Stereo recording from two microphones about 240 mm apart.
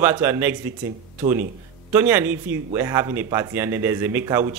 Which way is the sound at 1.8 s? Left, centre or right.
Centre.